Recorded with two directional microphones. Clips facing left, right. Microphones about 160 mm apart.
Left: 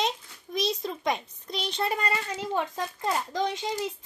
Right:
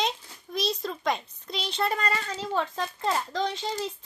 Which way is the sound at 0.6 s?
15° left (ahead or behind).